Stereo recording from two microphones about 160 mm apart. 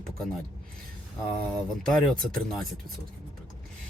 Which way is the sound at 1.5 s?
5° left (ahead or behind).